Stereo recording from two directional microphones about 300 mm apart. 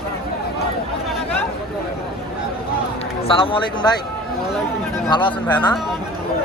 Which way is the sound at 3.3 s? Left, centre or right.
Centre.